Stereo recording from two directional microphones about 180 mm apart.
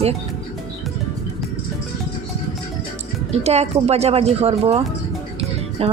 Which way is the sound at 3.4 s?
35° right (ahead or behind).